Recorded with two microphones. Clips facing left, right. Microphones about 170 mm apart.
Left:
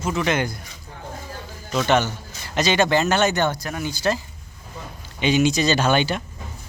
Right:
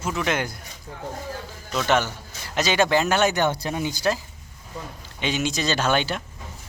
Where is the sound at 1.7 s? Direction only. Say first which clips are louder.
Left 2 dB; centre (ahead or behind).